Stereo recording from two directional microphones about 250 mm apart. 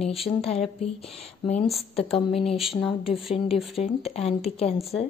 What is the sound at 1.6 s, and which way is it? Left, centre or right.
Speech, centre.